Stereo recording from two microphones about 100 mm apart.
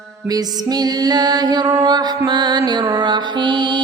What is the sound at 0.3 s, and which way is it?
Music, 40° right (ahead or behind).